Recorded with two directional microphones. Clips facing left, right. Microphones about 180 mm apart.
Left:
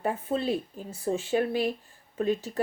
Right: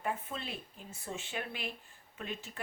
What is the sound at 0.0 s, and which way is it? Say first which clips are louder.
A woman's voice: left 10 dB; 35° left (ahead or behind).